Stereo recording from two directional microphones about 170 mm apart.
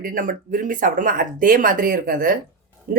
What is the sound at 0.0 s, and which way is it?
Speech, 55° right (ahead or behind).